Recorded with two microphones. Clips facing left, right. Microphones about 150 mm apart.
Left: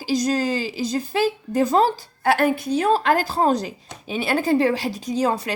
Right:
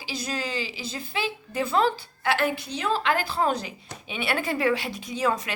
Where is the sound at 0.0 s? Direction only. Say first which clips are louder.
Left 11 dB; 40° left (ahead or behind).